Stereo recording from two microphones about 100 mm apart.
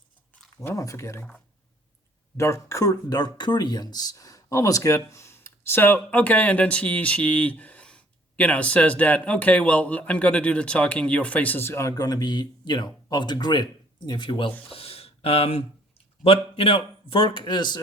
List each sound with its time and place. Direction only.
0.5 s speech: 30° left (ahead or behind)
2.4 s speech: 30° left (ahead or behind)
11.9 s speech: 40° left (ahead or behind); by 14.5 s 55° left (ahead or behind)
14.7 s speech: 75° left (ahead or behind); by 17.7 s 50° left (ahead or behind)